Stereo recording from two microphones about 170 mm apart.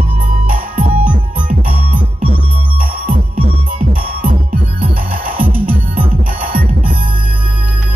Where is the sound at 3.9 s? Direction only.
55° right (ahead or behind).